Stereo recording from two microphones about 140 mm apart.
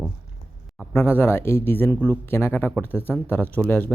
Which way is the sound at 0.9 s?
15° left (ahead or behind).